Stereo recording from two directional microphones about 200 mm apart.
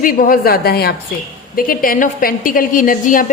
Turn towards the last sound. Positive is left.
turn(degrees=40)  # may be behind; listen again after turning